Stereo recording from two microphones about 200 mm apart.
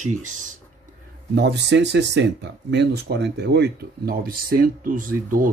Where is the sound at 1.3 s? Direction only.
60° right (ahead or behind).